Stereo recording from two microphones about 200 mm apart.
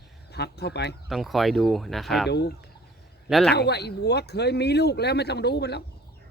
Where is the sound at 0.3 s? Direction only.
55° left (ahead or behind).